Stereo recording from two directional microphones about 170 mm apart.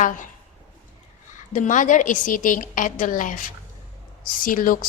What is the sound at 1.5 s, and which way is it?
A woman's voice, 50° left (ahead or behind).